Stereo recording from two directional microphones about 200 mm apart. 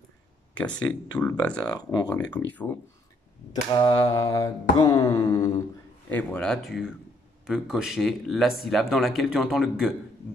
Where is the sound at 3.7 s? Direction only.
20° left (ahead or behind).